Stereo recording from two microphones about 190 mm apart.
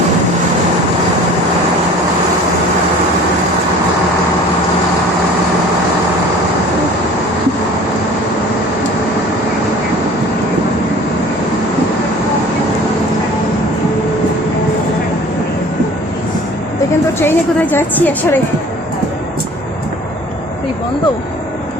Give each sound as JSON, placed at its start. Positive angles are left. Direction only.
{"t": 17.2, "sound": "a woman's voice", "side_deg": 10}